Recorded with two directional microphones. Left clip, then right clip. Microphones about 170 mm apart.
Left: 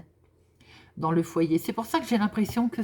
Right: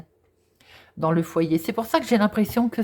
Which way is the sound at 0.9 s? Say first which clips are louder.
Right 3 dB; 35° right (ahead or behind).